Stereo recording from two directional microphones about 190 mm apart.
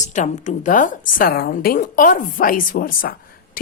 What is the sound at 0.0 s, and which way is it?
A woman's voice, 40° left (ahead or behind).